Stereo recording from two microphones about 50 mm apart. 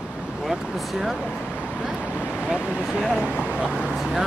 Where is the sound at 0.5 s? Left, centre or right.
Centre.